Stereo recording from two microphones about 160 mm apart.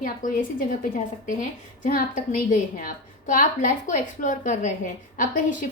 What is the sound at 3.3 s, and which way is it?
A woman's voice, 55° left (ahead or behind).